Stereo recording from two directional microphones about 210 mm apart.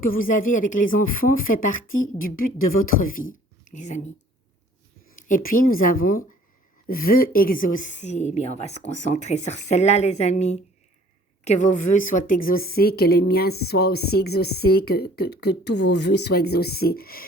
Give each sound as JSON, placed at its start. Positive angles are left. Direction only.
{"t": 0.0, "sound": "speech", "side_deg": 40}
{"t": 5.1, "sound": "a woman's voice", "side_deg": 40}